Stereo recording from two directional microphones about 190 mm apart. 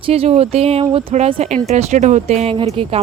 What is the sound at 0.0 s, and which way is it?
Speech, 30° right (ahead or behind).